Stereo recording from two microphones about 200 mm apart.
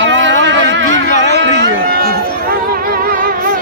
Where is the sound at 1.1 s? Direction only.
35° left (ahead or behind).